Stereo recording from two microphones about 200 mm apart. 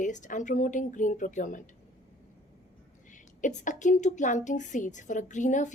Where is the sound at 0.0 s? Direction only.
40° left (ahead or behind).